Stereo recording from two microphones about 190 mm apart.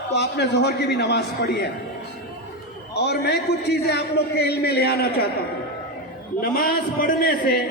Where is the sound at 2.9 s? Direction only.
60° left (ahead or behind).